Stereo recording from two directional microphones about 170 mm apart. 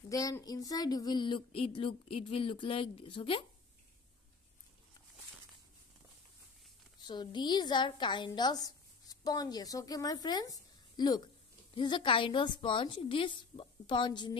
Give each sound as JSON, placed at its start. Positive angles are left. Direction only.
{"t": 0.1, "sound": "a woman's voice", "side_deg": 20}
{"t": 7.0, "sound": "a woman's voice", "side_deg": 25}